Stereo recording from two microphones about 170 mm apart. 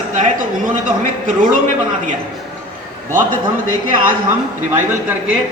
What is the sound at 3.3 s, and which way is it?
Speech, 50° right (ahead or behind).